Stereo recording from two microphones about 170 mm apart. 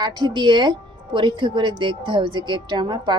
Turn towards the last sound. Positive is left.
turn(degrees=-25)  # may be behind; listen again after turning